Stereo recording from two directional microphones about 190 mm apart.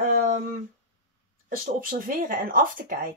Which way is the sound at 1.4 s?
45° right (ahead or behind).